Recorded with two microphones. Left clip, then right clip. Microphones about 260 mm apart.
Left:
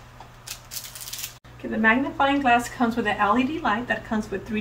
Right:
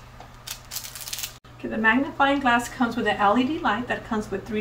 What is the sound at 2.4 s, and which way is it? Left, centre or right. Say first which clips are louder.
A woman's voice: left 1 dB; centre.